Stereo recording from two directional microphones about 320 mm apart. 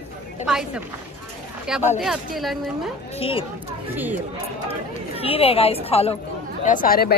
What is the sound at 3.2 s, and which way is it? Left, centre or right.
Speech, centre.